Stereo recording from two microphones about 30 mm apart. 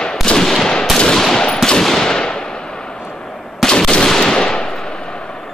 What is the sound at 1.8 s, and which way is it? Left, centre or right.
Gunshot, centre.